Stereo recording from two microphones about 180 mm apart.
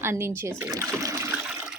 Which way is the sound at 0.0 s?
15° right (ahead or behind).